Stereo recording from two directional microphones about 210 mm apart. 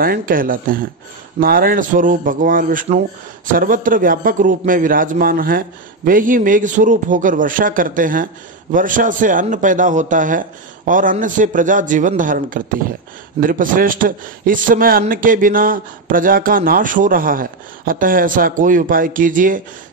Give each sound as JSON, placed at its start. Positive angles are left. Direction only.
{"t": 0.0, "sound": "a man's voice", "side_deg": -45}